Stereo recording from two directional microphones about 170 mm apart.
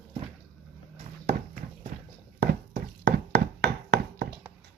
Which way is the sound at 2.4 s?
75° right (ahead or behind).